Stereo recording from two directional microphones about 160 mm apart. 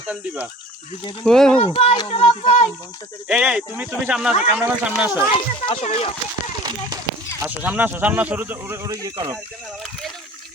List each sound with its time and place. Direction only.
1.2 s speech: centre (ahead or behind)
1.6 s speech: 35° left (ahead or behind)
3.2 s speech: 5° right (ahead or behind)
5.6 s speech: 40° left (ahead or behind)
6.6 s a sound: 25° right (ahead or behind)
7.4 s speech: 10° right (ahead or behind)